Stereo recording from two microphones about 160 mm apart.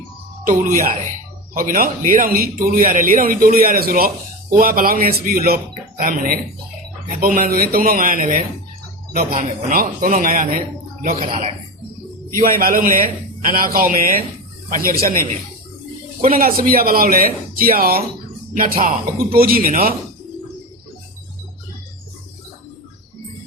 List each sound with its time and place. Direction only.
0.4 s a man's voice: 55° right (ahead or behind)
16.2 s a man's voice: 65° right (ahead or behind)